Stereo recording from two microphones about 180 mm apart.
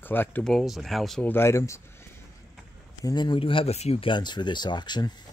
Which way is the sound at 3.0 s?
25° left (ahead or behind).